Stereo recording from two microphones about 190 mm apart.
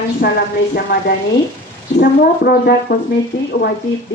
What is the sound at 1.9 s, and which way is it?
Brass instrument, 55° left (ahead or behind).